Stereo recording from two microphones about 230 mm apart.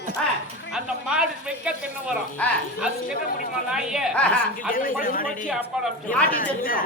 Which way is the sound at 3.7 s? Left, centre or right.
Centre.